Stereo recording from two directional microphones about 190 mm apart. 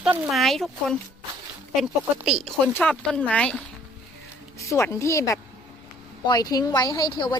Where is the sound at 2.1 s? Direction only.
5° right (ahead or behind).